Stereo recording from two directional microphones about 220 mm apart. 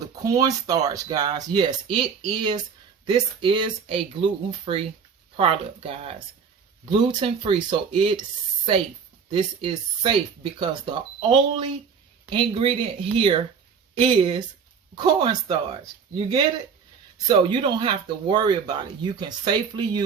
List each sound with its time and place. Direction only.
0.3 s speech: 15° right (ahead or behind)
9.3 s speech: 25° right (ahead or behind)